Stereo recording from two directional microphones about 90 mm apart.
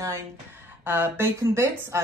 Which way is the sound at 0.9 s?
25° right (ahead or behind).